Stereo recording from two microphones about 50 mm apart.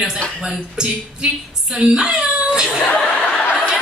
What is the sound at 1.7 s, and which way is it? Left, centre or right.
Speech, centre.